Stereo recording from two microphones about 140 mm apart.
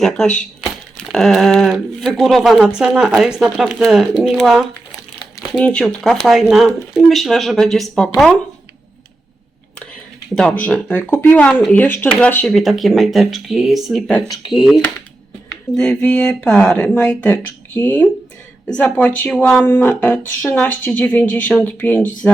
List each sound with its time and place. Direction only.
0.0 s speech: 5° left (ahead or behind)
10.3 s speech: 5° left (ahead or behind)
12.5 s speech: centre (ahead or behind)
14.4 s speech: 30° left (ahead or behind)
15.7 s speech: 5° left (ahead or behind)